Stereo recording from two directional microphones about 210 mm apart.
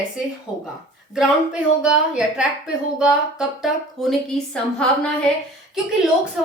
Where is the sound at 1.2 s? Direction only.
5° right (ahead or behind).